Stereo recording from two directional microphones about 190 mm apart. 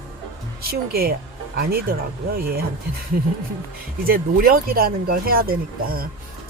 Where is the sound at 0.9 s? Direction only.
50° right (ahead or behind).